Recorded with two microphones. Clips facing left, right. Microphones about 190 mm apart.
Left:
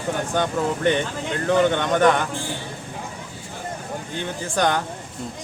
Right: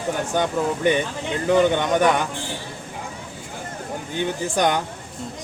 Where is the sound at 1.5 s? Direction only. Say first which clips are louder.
Right 1 dB; 10° right (ahead or behind).